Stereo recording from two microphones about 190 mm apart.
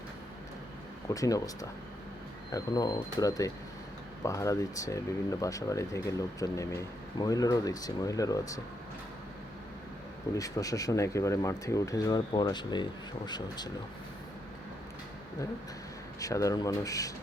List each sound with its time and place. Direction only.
1.1 s speech: 15° left (ahead or behind)
2.5 s speech: 20° left (ahead or behind)
10.3 s speech: 15° left (ahead or behind)
16.2 s speech: 15° left (ahead or behind)